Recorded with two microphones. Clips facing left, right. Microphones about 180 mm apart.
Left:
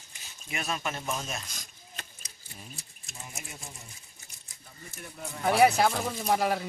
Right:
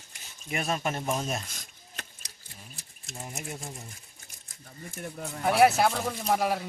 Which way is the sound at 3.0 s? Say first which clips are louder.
Right 7 dB; 50° right (ahead or behind).